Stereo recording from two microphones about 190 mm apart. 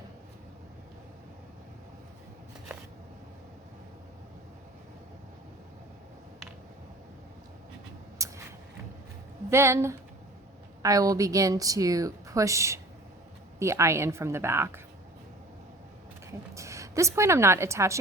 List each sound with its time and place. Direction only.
8.2 s a sound: 15° right (ahead or behind)
9.5 s speech: 15° right (ahead or behind)
16.2 s a woman's voice: 15° right (ahead or behind)